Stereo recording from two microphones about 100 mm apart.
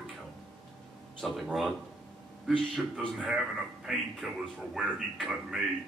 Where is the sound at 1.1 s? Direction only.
Centre (ahead or behind).